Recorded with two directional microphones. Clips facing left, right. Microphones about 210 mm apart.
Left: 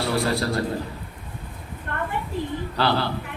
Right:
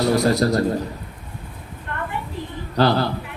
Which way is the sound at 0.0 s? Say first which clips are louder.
Right 6 dB; 40° right (ahead or behind).